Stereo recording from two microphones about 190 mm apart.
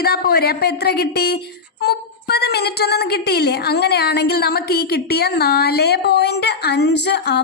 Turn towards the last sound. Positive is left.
turn(degrees=60)  # may be behind; listen again after turning